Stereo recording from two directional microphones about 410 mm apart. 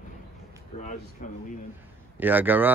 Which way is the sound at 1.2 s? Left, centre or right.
Centre.